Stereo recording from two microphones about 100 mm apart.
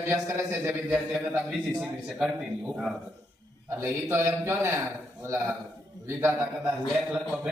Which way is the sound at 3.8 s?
25° right (ahead or behind).